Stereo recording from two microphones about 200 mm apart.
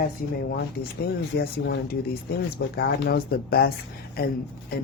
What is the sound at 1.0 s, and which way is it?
Speech, 50° left (ahead or behind).